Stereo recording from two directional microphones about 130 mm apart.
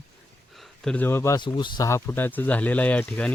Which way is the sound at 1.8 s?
20° left (ahead or behind).